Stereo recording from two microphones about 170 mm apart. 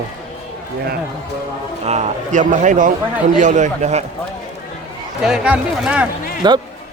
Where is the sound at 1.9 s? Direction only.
40° right (ahead or behind).